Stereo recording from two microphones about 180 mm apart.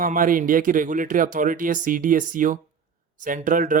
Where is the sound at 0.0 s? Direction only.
50° right (ahead or behind).